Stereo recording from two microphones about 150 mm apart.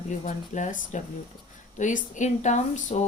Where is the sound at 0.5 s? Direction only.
55° left (ahead or behind).